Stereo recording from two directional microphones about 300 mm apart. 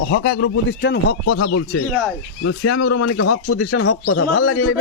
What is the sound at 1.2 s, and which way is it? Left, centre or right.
Speech, left.